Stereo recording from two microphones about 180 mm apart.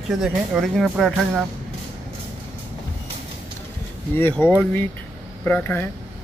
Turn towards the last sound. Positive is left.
turn(degrees=10)  # may be behind; listen again after turning